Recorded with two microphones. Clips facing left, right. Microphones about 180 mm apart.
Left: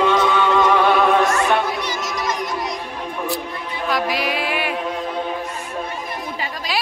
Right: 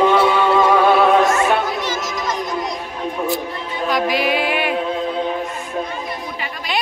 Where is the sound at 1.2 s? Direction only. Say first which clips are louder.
Right 2 dB; 20° right (ahead or behind).